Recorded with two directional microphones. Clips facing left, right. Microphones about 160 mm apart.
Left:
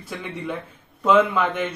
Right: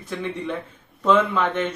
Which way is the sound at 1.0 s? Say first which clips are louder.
Left 1 dB; 10° left (ahead or behind).